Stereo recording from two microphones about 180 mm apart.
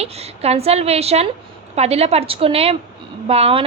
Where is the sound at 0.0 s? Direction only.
35° right (ahead or behind).